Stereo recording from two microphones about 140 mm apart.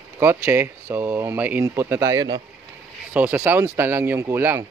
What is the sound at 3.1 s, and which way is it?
A man's voice, 15° right (ahead or behind).